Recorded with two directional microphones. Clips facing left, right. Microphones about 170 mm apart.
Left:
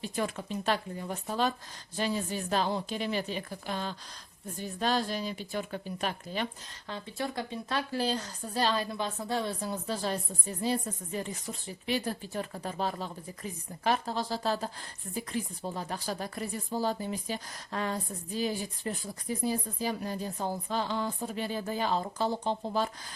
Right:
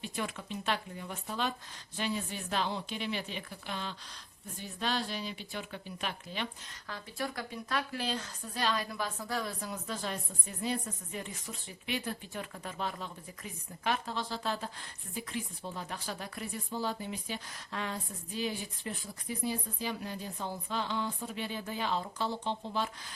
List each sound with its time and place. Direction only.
0.0 s a woman's voice: 35° left (ahead or behind)
6.8 s a woman's voice: 25° left (ahead or behind); by 22.9 s 40° left (ahead or behind)